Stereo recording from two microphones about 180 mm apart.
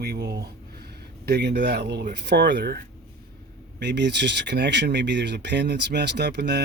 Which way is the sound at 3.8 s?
75° right (ahead or behind).